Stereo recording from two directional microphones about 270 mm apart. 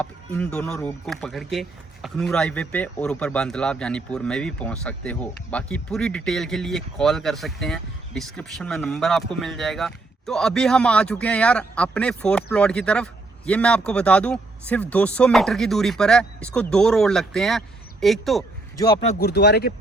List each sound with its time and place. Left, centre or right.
0.0 s speech: centre
19.0 s speech: left